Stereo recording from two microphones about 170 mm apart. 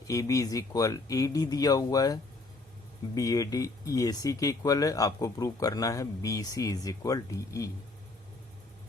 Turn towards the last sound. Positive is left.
turn(degrees=20)  # may be behind; listen again after turning